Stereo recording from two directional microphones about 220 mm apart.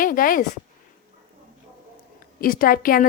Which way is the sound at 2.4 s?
40° left (ahead or behind).